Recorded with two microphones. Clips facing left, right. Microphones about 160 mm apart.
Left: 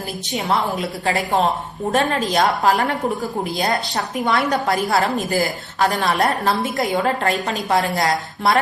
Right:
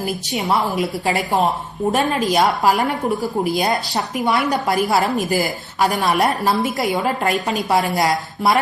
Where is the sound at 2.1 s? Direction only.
Centre (ahead or behind).